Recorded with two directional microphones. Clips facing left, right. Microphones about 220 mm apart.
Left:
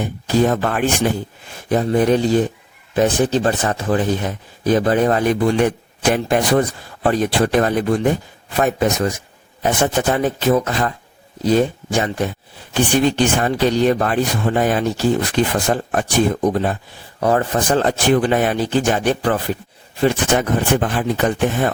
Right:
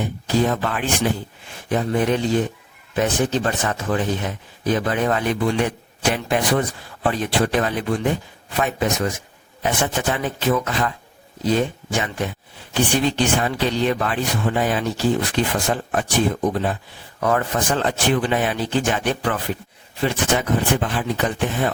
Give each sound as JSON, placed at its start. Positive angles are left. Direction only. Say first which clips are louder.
{"t": 0.3, "sound": "speech", "louder": "left 4 dB", "side_deg": 45}
{"t": 1.7, "sound": "speech", "louder": "left 5 dB", "side_deg": 35}
{"t": 12.7, "sound": "speech", "louder": "left 4 dB", "side_deg": 50}